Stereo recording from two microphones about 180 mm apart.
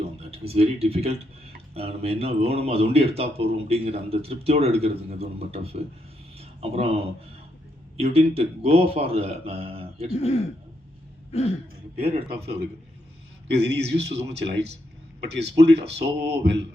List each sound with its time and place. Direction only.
0.2 s speech: 35° right (ahead or behind)
11.3 s throat clearing: 35° left (ahead or behind)
11.9 s speech: 35° right (ahead or behind)
13.5 s a man's voice: 70° right (ahead or behind)